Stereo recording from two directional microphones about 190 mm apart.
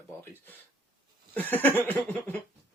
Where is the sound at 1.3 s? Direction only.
10° left (ahead or behind).